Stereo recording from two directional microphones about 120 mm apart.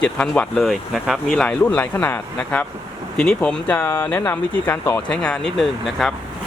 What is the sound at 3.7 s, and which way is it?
Speech, 20° left (ahead or behind).